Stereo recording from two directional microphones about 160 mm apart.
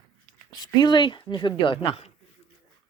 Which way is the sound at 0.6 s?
25° left (ahead or behind).